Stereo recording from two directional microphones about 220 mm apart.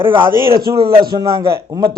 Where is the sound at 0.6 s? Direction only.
25° right (ahead or behind).